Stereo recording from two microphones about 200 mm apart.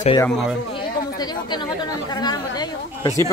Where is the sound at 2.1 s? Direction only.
20° left (ahead or behind).